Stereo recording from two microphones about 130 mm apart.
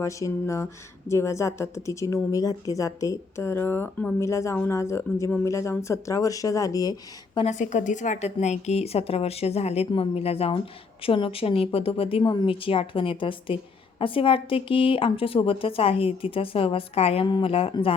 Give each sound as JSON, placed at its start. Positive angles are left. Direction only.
{"t": 0.0, "sound": "speech", "side_deg": 25}
{"t": 4.2, "sound": "speech", "side_deg": 20}
{"t": 7.4, "sound": "speech", "side_deg": 70}
{"t": 17.2, "sound": "speech", "side_deg": 35}
{"t": 17.5, "sound": "speech", "side_deg": 45}